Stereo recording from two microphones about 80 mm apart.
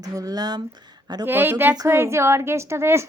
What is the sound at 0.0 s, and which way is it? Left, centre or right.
Speech, right.